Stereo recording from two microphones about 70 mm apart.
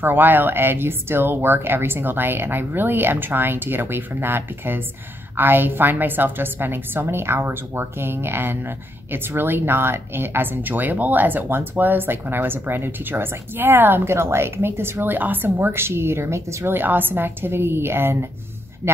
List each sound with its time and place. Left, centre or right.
0.0 s a woman's voice: right
16.7 s a woman's voice: right